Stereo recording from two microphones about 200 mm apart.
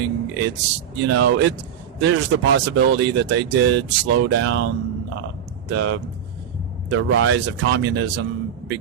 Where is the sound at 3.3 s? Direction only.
65° right (ahead or behind).